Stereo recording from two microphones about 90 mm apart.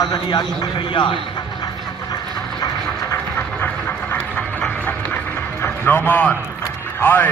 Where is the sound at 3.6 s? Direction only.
20° left (ahead or behind).